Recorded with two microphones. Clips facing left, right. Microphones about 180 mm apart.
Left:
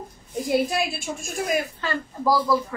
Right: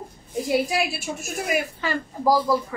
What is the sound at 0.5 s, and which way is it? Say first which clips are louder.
A woman's voice: even; 5° right (ahead or behind).